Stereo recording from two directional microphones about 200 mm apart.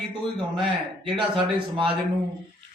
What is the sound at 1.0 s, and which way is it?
Speech, 25° right (ahead or behind).